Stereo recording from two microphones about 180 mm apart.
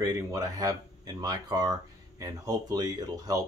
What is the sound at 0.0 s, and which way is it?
Speech, 20° right (ahead or behind).